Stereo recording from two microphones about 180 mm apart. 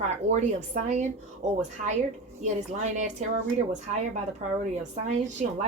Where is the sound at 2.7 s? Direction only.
40° right (ahead or behind).